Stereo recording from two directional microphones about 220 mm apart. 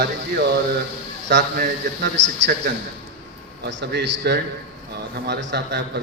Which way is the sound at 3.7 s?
55° right (ahead or behind).